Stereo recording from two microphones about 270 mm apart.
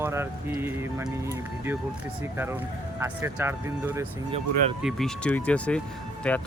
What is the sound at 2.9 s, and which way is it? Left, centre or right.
Speech, centre.